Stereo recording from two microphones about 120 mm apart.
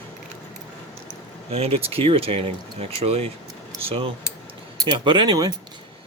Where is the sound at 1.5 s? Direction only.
55° right (ahead or behind); by 5.5 s 35° right (ahead or behind).